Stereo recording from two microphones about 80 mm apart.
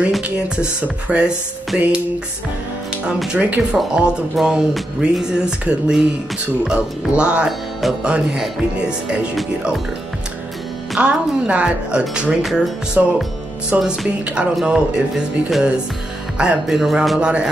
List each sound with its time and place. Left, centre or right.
1.0 s music: centre
3.3 s music: centre
3.7 s music: centre
7.4 s speech: centre
8.1 s music: centre
11.0 s music: centre
12.4 s music: centre
13.0 s music: centre
17.2 s music: centre